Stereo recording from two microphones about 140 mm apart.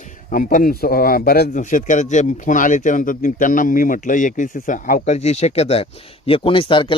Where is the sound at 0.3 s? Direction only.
75° left (ahead or behind).